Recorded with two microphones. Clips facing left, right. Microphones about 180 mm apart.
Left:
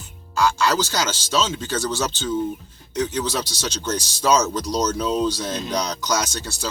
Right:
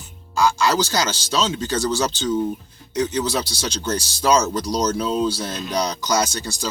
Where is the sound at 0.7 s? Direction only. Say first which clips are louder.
Right 2 dB; 10° right (ahead or behind).